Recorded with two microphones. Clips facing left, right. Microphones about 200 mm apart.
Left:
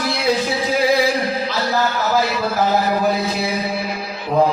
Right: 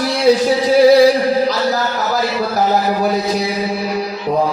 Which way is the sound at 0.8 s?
40° right (ahead or behind).